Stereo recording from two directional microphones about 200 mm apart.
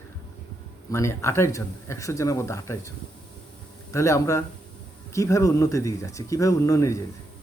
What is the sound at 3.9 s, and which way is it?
A man's voice, 15° left (ahead or behind).